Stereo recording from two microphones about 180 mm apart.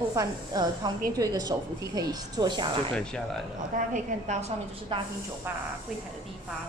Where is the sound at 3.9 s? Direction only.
40° right (ahead or behind).